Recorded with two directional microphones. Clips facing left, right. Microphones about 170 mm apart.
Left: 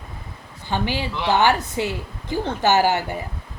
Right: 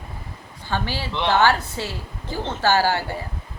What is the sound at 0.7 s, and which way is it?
A woman's voice, 15° left (ahead or behind).